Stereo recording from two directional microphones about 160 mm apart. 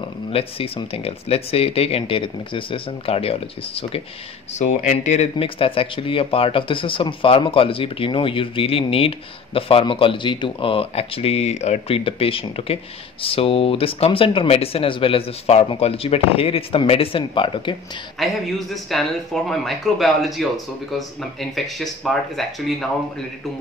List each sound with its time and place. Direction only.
0.3 s speech: 35° left (ahead or behind)
18.2 s speech: centre (ahead or behind)